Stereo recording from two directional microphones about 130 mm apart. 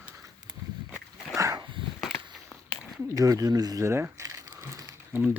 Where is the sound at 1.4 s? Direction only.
25° right (ahead or behind).